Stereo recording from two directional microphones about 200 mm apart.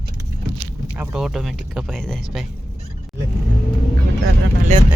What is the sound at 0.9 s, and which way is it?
Speech, 5° right (ahead or behind).